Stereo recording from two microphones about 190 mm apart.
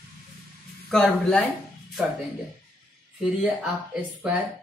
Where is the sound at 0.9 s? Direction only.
5° left (ahead or behind).